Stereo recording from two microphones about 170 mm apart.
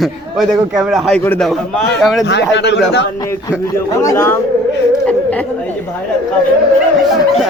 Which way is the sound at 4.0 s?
15° left (ahead or behind).